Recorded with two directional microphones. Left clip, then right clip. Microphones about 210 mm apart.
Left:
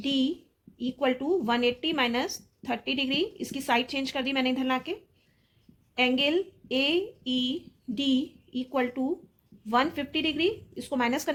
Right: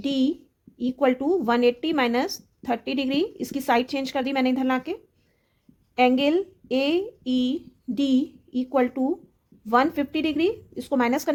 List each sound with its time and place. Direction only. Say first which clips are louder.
0.0 s a woman's voice: right 3 dB; 55° right (ahead or behind)
6.0 s speech: right 5 dB; 55° right (ahead or behind)